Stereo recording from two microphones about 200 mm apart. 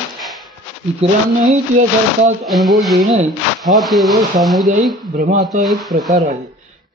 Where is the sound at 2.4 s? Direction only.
Centre (ahead or behind).